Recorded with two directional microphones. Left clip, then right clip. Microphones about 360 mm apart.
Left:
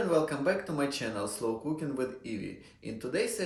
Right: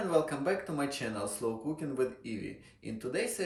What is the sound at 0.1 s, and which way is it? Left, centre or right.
Speech, centre.